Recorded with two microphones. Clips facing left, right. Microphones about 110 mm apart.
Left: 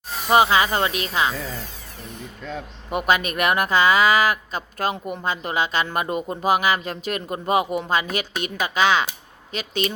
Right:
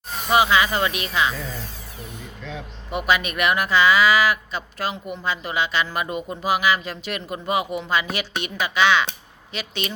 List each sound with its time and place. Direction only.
0.3 s speech: 35° left (ahead or behind)
2.5 s speech: 45° left (ahead or behind)